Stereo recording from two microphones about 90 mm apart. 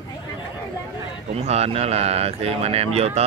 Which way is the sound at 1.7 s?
90° right.